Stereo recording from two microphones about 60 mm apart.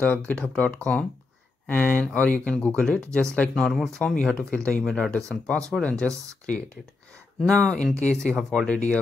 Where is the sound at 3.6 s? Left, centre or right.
Centre.